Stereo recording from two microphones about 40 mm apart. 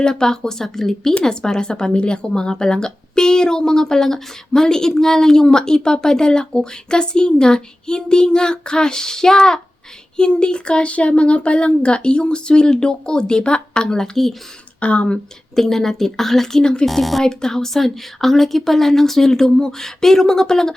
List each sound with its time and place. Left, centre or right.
0.0 s speech: centre
14.8 s speech: left
15.5 s speech: centre
17.2 s speech: centre